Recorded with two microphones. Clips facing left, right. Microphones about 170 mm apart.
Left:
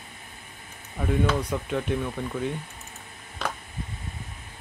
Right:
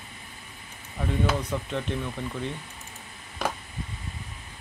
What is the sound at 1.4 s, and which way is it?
Speech, 10° left (ahead or behind).